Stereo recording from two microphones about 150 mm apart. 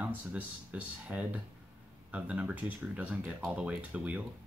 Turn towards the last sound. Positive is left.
turn(degrees=-10)  # may be behind; listen again after turning